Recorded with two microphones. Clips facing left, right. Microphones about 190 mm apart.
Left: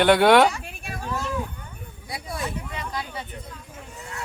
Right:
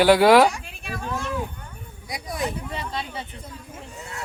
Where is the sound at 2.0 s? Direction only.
15° right (ahead or behind).